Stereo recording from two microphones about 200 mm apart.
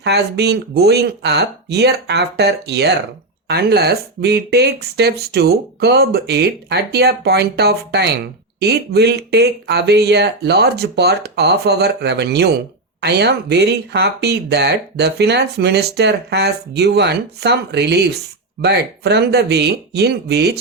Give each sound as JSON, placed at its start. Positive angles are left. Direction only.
{"t": 0.0, "sound": "speech", "side_deg": -55}